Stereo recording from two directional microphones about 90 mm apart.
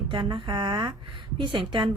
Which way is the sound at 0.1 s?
70° right (ahead or behind).